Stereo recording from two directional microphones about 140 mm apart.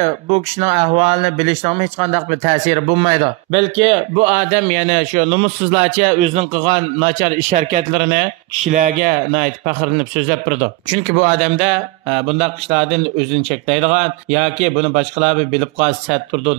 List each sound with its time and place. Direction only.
0.0 s speech: 50° right (ahead or behind)
7.2 s speech: 65° right (ahead or behind); by 16.5 s 45° right (ahead or behind)